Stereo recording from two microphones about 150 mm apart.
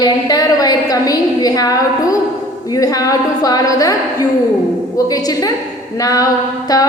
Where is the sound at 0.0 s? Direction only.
25° left (ahead or behind).